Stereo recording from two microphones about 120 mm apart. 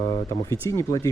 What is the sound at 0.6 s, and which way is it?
Speech, 25° left (ahead or behind).